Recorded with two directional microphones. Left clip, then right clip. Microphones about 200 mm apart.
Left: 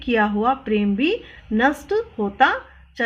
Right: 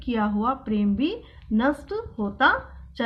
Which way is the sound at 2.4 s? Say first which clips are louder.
Left 3 dB; 35° left (ahead or behind).